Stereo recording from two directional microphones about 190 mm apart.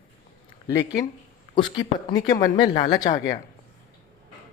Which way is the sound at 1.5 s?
25° left (ahead or behind).